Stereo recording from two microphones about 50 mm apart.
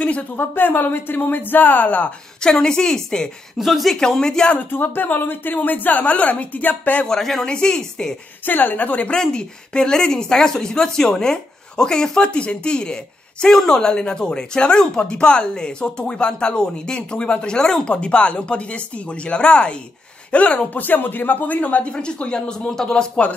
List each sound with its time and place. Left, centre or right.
0.4 s a woman's voice: left
2.4 s speech: centre
3.5 s speech: centre
3.9 s speech: centre
4.6 s a woman's voice: left
7.1 s speech: centre
7.4 s speech: centre
8.5 s a woman's voice: left
9.1 s speech: centre
20.7 s a woman's voice: left; by 23.2 s centre